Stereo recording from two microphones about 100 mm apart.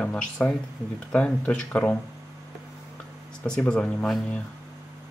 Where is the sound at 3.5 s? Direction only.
10° left (ahead or behind).